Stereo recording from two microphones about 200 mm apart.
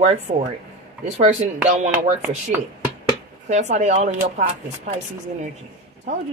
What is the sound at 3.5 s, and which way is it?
Speech, 35° right (ahead or behind).